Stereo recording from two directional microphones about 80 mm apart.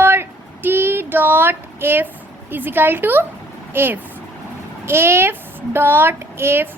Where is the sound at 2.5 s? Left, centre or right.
Right.